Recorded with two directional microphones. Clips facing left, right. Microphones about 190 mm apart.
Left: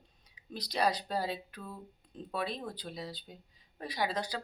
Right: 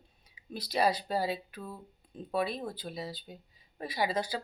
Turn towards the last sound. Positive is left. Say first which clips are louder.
# right 3 dB
turn(degrees=-5)  # may be behind; listen again after turning